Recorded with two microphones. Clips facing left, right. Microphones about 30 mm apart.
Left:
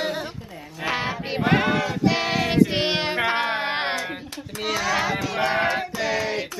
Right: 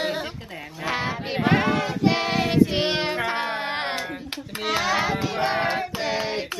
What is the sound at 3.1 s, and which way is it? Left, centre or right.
Music, centre.